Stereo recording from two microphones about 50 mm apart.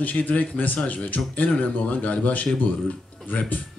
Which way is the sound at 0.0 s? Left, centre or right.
Left.